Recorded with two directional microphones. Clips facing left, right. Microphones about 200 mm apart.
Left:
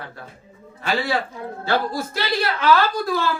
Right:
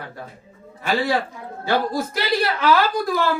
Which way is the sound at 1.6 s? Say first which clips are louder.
Right 2 dB; 15° right (ahead or behind).